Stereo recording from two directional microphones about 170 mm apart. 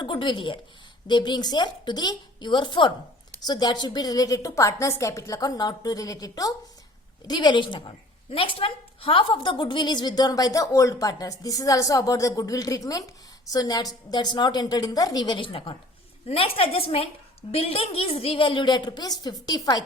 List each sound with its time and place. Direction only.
0.0 s a woman's voice: 30° left (ahead or behind)